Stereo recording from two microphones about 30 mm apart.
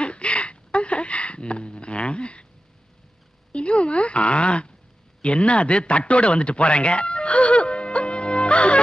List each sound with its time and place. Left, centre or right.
0.0 s a sound: left
3.5 s a woman's voice: left
5.2 s radio: left